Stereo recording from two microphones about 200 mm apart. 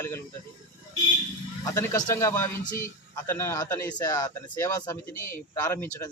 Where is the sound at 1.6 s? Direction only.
15° left (ahead or behind).